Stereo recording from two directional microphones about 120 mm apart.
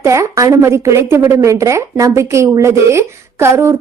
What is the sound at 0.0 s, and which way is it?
A woman's voice, 25° right (ahead or behind).